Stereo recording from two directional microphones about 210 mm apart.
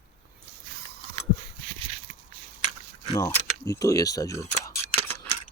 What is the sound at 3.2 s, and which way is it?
Speech, 15° left (ahead or behind).